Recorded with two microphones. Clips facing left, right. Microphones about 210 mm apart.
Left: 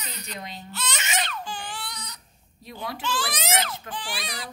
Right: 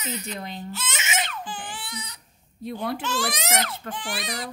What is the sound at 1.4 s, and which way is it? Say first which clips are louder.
Baby cry: even; 25° right (ahead or behind).